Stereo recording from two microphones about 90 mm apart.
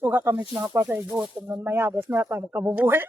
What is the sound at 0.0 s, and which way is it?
A man's voice, 20° right (ahead or behind).